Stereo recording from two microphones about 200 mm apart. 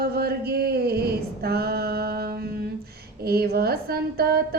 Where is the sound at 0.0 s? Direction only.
50° right (ahead or behind).